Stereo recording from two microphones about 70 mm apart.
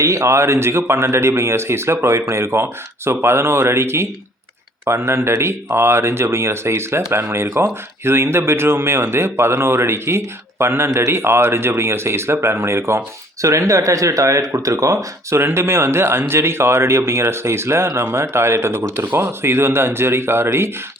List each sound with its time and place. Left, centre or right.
0.0 s speech: right